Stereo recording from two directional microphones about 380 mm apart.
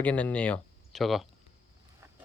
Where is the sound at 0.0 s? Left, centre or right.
Centre.